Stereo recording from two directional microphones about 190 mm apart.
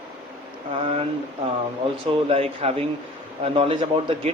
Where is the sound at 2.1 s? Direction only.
30° right (ahead or behind).